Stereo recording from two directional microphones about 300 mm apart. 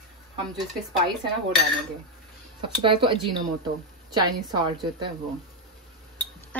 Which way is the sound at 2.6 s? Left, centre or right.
Centre.